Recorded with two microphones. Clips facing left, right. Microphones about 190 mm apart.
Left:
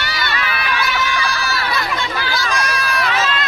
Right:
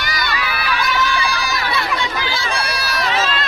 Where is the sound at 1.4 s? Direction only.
15° right (ahead or behind).